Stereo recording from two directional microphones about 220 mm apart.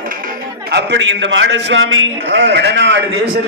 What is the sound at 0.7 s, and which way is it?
A man's voice, 55° right (ahead or behind).